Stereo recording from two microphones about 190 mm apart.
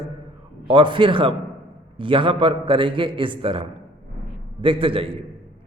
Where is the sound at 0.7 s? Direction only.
25° right (ahead or behind).